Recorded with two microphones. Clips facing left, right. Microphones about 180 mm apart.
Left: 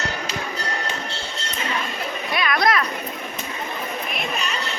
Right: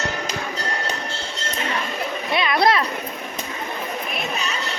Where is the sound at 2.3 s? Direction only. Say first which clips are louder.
Right 2 dB; 25° right (ahead or behind).